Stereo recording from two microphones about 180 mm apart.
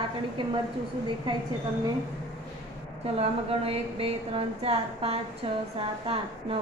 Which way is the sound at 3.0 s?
30° right (ahead or behind).